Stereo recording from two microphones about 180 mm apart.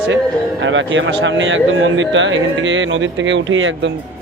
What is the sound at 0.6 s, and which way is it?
Speech, 90° right.